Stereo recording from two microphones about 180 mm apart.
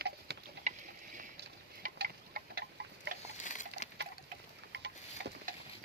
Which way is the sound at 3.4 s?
45° left (ahead or behind).